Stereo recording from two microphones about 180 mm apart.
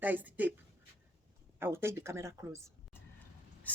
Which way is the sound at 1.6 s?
15° right (ahead or behind).